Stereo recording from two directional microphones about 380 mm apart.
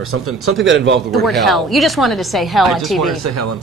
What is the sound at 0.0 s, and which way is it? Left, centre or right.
Speech, right.